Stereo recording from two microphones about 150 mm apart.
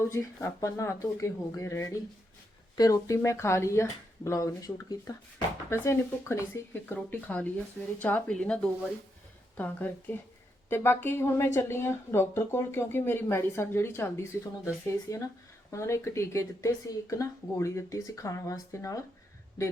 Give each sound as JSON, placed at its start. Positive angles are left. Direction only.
{"t": 0.1, "sound": "a woman's voice", "side_deg": 20}